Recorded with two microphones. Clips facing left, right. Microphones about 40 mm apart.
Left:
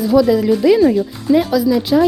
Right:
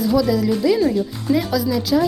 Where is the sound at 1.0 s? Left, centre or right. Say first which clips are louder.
Left 5 dB; centre.